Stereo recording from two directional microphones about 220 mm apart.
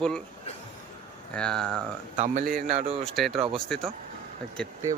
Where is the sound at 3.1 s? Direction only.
Centre (ahead or behind).